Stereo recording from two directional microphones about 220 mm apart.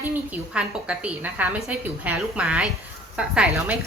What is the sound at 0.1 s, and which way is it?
A woman's voice, 5° right (ahead or behind).